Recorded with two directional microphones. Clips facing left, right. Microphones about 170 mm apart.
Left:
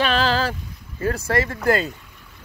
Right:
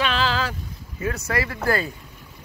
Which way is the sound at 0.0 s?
40° left (ahead or behind).